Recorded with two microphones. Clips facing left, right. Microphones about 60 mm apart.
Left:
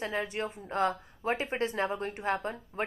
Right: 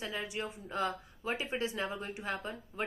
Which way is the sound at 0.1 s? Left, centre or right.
Left.